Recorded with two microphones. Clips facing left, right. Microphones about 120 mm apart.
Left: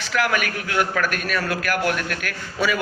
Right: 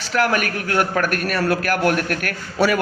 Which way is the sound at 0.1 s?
40° right (ahead or behind).